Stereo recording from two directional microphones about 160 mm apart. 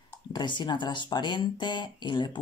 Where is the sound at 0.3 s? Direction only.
30° left (ahead or behind).